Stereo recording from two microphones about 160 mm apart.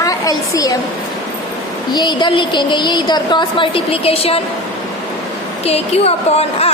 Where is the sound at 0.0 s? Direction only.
20° left (ahead or behind).